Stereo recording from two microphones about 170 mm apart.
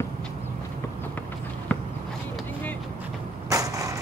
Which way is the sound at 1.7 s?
10° left (ahead or behind).